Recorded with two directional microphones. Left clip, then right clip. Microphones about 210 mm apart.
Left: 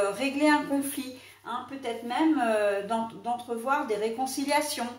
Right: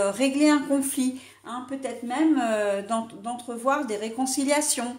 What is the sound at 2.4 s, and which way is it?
Speech, 50° right (ahead or behind).